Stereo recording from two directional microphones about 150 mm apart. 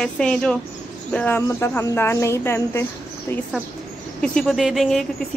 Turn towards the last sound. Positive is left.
turn(degrees=0)  # may be behind; listen again after turning